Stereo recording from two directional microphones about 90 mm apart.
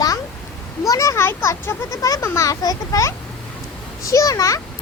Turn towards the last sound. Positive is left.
turn(degrees=40)  # may be behind; listen again after turning